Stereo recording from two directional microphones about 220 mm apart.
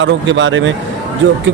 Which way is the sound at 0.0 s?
55° right (ahead or behind).